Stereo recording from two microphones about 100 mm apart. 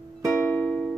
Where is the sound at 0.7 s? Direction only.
5° left (ahead or behind).